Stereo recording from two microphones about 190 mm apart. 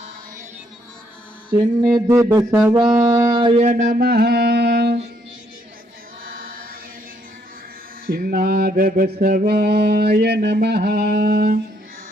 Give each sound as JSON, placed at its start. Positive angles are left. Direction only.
{"t": 1.5, "sound": "speech", "side_deg": -5}
{"t": 2.7, "sound": "music", "side_deg": -20}
{"t": 6.2, "sound": "chant", "side_deg": -50}
{"t": 8.0, "sound": "mantra", "side_deg": -50}